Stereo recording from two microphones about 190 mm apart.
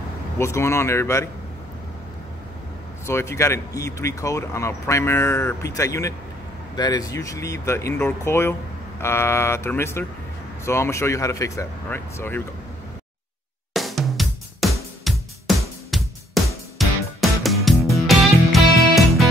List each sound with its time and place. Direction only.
0.4 s speech: 15° left (ahead or behind)
3.1 s speech: 15° left (ahead or behind)
13.7 s music: centre (ahead or behind)